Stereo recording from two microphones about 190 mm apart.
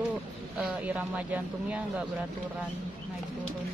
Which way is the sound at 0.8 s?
5° right (ahead or behind).